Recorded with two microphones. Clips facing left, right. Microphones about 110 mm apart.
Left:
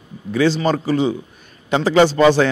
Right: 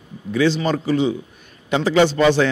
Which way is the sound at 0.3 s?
40° left (ahead or behind).